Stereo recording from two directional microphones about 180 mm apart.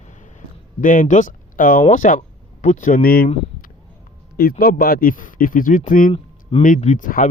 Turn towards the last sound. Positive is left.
turn(degrees=45)  # may be behind; listen again after turning